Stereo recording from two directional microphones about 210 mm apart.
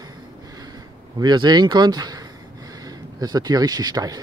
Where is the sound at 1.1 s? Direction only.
20° right (ahead or behind).